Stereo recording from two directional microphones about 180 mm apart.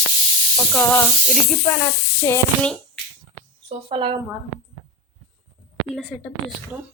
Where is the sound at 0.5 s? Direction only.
5° left (ahead or behind).